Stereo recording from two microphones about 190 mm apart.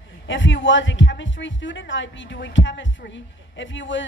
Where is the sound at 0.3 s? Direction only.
75° left (ahead or behind).